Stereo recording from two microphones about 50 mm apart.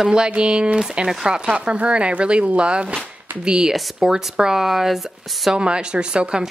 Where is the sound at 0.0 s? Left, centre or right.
Centre.